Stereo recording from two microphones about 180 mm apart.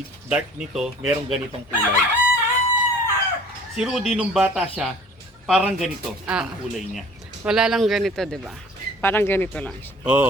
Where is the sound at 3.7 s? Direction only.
5° right (ahead or behind).